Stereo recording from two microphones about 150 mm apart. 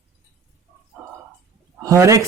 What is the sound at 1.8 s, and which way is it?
Speech, 20° right (ahead or behind).